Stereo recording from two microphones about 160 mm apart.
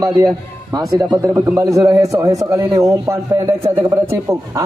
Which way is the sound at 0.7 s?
25° right (ahead or behind).